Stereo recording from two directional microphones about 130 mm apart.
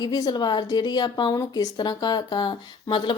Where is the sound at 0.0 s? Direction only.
30° left (ahead or behind).